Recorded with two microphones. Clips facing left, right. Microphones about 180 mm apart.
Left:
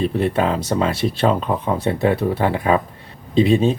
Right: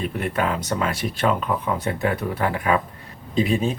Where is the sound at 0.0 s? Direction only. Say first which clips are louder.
Left 6 dB; 30° left (ahead or behind).